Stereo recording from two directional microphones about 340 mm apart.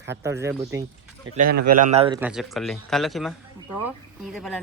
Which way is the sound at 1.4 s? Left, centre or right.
Right.